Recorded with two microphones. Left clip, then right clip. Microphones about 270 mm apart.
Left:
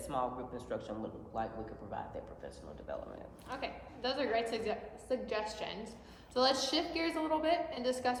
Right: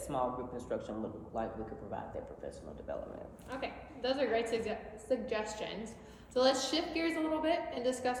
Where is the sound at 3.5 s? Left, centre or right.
Centre.